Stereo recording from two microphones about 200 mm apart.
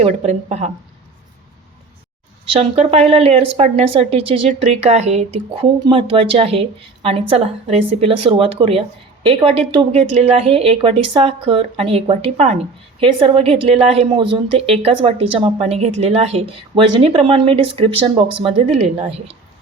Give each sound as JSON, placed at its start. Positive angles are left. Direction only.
{"t": 0.0, "sound": "speech", "side_deg": -30}
{"t": 2.5, "sound": "speech", "side_deg": -30}